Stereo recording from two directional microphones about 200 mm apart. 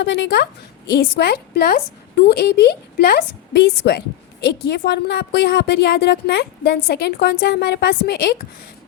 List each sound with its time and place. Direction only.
0.0 s a woman's voice: 60° left (ahead or behind)